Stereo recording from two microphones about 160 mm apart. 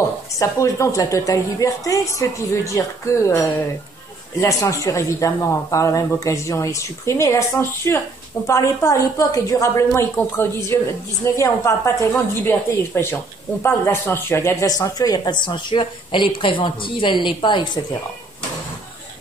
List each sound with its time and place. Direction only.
0.4 s speech: 20° left (ahead or behind)